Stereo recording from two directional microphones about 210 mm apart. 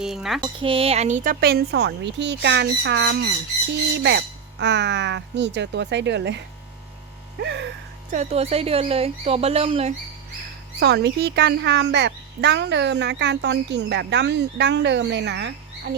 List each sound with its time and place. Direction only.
0.0 s speech: centre (ahead or behind)
0.4 s speech: 25° right (ahead or behind); by 7.7 s 55° right (ahead or behind)
8.1 s speech: 30° right (ahead or behind)
10.8 s speech: 55° right (ahead or behind)